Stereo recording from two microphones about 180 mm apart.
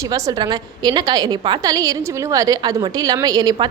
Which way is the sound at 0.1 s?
20° right (ahead or behind).